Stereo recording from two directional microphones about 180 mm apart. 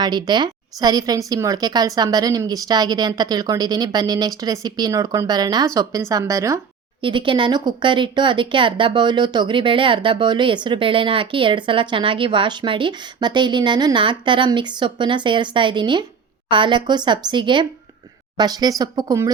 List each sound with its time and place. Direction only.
0.0 s speech: 25° right (ahead or behind)
7.0 s speech: 25° right (ahead or behind)